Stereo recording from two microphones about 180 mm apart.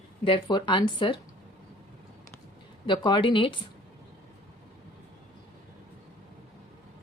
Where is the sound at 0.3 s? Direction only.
25° left (ahead or behind).